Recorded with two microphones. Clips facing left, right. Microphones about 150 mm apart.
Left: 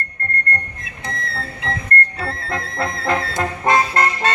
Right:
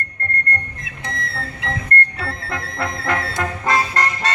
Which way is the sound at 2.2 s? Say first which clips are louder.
Left 2 dB; 20° left (ahead or behind).